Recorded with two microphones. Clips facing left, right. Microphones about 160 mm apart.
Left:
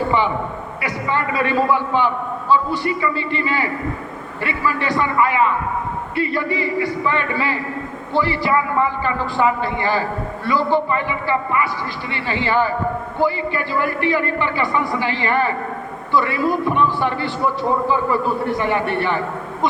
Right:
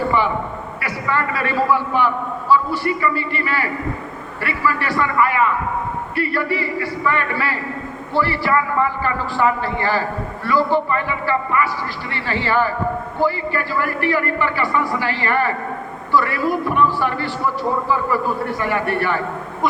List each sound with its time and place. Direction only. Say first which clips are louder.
0.8 s a man's voice: even; 20° left (ahead or behind)